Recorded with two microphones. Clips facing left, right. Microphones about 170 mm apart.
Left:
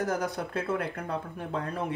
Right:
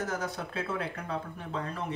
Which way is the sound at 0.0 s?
50° left (ahead or behind).